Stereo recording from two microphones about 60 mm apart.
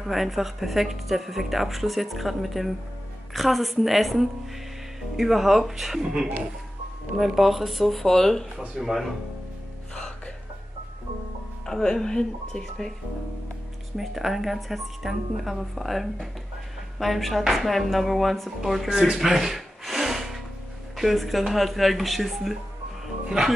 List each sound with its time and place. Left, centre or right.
0.0 s speech: centre
8.5 s speech: centre
9.9 s music: centre
11.6 s speech: centre
13.9 s speech: centre
18.9 s gasp: centre
20.9 s speech: centre
23.2 s speech: centre